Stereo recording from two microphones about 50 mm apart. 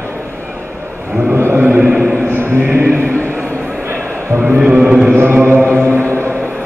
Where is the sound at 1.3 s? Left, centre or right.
Right.